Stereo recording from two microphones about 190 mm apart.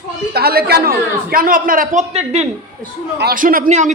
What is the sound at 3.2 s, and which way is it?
Speech, 45° right (ahead or behind).